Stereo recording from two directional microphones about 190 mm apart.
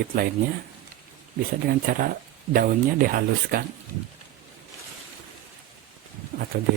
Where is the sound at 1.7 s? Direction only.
50° right (ahead or behind).